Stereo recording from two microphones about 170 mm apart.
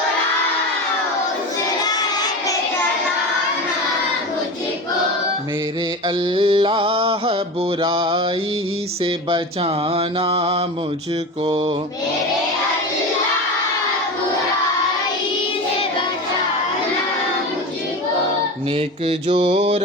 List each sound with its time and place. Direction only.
1.8 s crowd: 20° left (ahead or behind)
6.3 s carnatic music: 30° right (ahead or behind)
9.9 s carnatic music: 35° right (ahead or behind)
19.0 s carnatic music: 35° right (ahead or behind)